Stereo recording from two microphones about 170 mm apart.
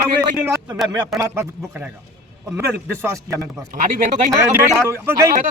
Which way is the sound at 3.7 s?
50° right (ahead or behind).